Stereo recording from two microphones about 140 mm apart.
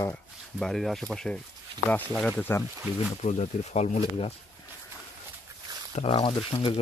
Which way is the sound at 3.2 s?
55° left (ahead or behind).